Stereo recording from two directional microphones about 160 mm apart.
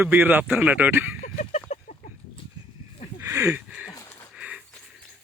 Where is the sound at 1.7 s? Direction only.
50° left (ahead or behind).